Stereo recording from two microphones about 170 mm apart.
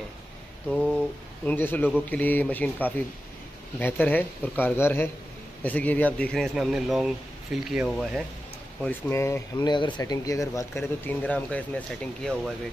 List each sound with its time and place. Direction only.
1.4 s speech: 10° left (ahead or behind)
8.8 s speech: 15° left (ahead or behind)